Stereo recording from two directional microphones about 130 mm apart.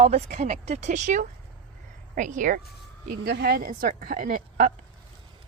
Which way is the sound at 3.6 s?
90° right.